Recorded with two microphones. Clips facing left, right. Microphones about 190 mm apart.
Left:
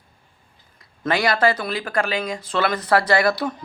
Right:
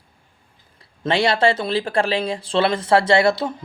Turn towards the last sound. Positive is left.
turn(degrees=-25)  # may be behind; listen again after turning